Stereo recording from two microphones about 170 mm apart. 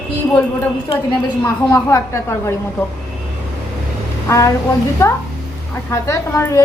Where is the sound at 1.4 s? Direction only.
15° left (ahead or behind).